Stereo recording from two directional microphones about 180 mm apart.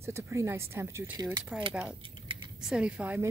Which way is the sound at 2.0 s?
30° right (ahead or behind).